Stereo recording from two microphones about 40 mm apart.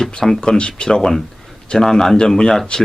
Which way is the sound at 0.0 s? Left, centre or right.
Centre.